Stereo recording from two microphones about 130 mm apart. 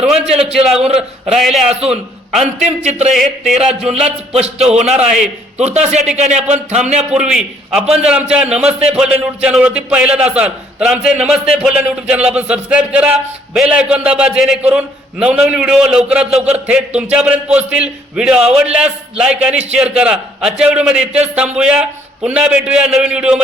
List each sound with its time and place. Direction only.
0.0 s a man's voice: 5° right (ahead or behind)
2.6 s speech: 60° right (ahead or behind)
3.1 s a man's voice: centre (ahead or behind)
4.4 s speech: 55° right (ahead or behind)
4.6 s a man's voice: 5° right (ahead or behind)
5.6 s speech: 60° right (ahead or behind)
6.7 s a man's voice: 5° right (ahead or behind)